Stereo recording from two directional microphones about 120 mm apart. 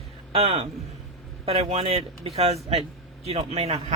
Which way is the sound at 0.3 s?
50° right (ahead or behind).